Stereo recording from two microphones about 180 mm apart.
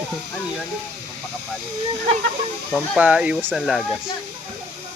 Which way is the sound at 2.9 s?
5° right (ahead or behind).